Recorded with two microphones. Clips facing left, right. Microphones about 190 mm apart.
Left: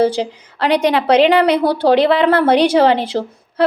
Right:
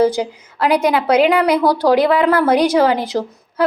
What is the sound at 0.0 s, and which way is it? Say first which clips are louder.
A woman's voice: even; 30° left (ahead or behind).